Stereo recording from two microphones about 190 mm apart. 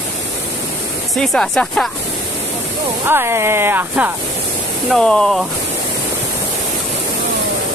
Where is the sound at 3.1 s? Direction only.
15° right (ahead or behind).